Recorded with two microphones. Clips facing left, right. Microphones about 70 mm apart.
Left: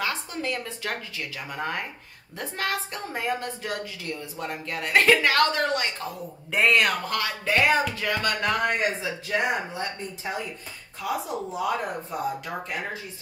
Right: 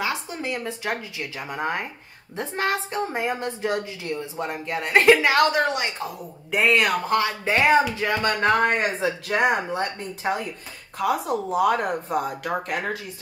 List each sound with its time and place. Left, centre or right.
0.0 s a woman's voice: centre
6.5 s speech: centre
7.1 s a woman's voice: right